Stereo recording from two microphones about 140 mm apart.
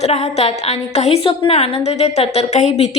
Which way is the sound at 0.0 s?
50° left (ahead or behind).